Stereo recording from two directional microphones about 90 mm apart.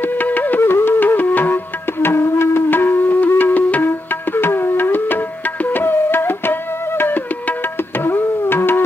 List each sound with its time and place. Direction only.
0.0 s music: 20° left (ahead or behind)